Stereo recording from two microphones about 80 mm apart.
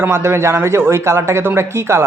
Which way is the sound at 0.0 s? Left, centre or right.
Right.